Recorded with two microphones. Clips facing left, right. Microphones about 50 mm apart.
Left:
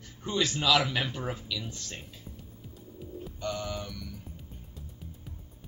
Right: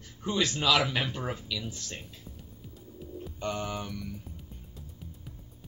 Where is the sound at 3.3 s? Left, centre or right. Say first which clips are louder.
Right 1 dB; right.